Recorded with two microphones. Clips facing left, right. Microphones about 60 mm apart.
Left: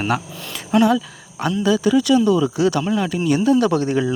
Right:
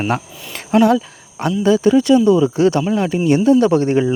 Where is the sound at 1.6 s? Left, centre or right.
Right.